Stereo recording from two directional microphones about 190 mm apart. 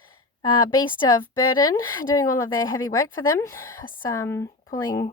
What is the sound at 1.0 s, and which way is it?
A woman's voice, 15° left (ahead or behind).